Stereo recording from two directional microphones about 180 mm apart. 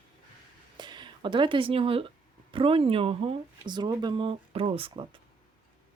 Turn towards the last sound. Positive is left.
turn(degrees=-30)  # may be behind; listen again after turning